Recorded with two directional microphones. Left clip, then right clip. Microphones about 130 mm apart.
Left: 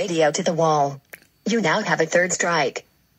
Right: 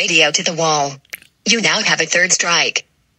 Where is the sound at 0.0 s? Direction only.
35° right (ahead or behind).